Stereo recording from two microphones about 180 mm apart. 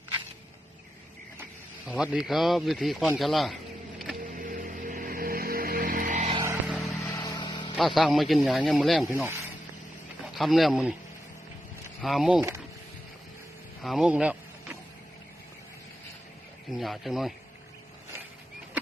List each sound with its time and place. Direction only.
1.9 s speech: 5° right (ahead or behind)
3.2 s a sound: centre (ahead or behind)
4.4 s music: 50° right (ahead or behind)
6.3 s vehicle: 15° right (ahead or behind)
7.1 s vehicle: 20° left (ahead or behind)
7.8 s speech: centre (ahead or behind)
9.1 s speech: 15° right (ahead or behind)
10.3 s speech: centre (ahead or behind)
12.0 s speech: centre (ahead or behind)
13.8 s a sound: centre (ahead or behind)
16.7 s speech: centre (ahead or behind)